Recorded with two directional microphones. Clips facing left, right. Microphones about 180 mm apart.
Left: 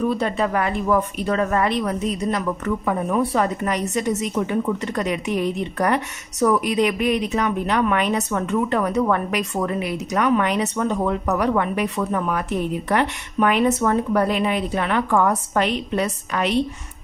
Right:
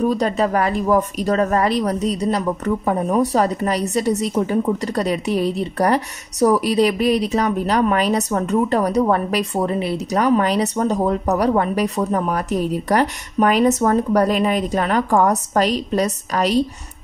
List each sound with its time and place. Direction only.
0.0 s speech: 40° right (ahead or behind)